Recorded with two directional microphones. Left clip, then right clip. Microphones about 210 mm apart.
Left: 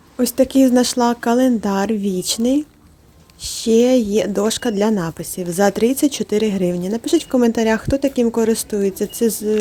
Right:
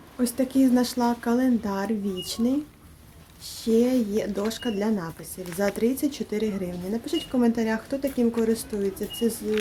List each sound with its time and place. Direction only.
0.2 s speech: 35° left (ahead or behind)